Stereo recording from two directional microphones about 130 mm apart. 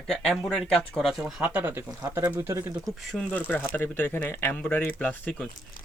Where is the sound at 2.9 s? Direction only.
Centre (ahead or behind).